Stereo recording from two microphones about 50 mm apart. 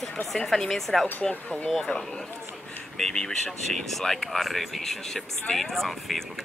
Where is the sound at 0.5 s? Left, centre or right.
Centre.